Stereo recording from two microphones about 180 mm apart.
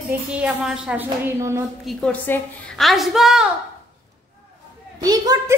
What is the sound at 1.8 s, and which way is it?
A woman's voice, 10° left (ahead or behind).